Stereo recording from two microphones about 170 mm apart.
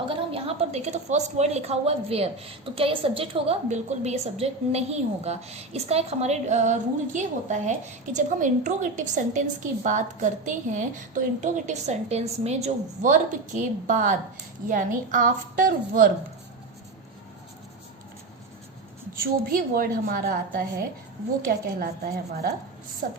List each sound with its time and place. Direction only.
0.1 s a woman's voice: 35° right (ahead or behind); by 16.0 s 55° right (ahead or behind)
19.1 s a woman's voice: 55° right (ahead or behind)